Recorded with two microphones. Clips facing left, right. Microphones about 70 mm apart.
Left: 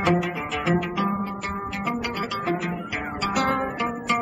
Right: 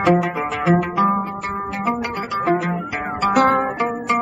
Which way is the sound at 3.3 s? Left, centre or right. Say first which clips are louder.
Right 8 dB; right.